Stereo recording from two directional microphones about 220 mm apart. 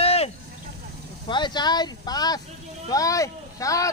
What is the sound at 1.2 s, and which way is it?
Speech, 20° left (ahead or behind).